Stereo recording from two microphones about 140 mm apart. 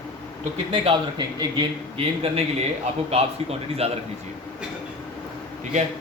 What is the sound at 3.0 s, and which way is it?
Speech, 45° right (ahead or behind).